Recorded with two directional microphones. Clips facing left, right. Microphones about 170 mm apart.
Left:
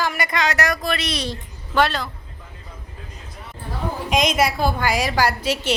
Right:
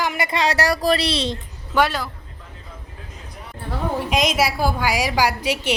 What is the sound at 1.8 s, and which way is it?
Speech, 10° right (ahead or behind).